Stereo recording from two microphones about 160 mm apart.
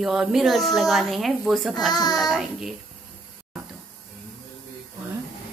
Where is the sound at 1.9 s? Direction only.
25° left (ahead or behind).